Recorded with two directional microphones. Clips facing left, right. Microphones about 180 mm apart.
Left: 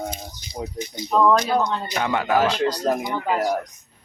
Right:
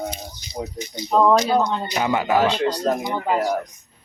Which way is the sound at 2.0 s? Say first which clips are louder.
Right 1 dB; centre (ahead or behind).